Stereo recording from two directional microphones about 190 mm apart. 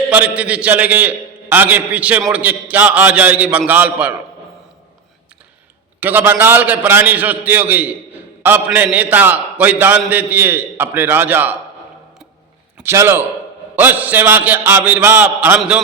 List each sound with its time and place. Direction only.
0.1 s a man's voice: 10° right (ahead or behind)
6.0 s a man's voice: 10° right (ahead or behind)
12.7 s a man's voice: 15° right (ahead or behind)